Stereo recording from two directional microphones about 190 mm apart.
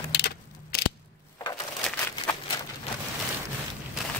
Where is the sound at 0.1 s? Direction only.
55° left (ahead or behind).